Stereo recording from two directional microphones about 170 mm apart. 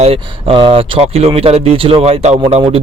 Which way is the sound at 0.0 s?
35° right (ahead or behind).